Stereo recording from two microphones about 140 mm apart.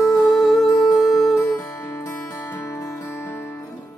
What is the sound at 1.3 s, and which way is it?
Music, 20° left (ahead or behind).